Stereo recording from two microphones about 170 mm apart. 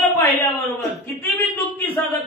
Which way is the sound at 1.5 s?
10° left (ahead or behind).